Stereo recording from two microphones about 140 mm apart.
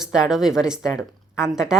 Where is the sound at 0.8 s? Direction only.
20° left (ahead or behind).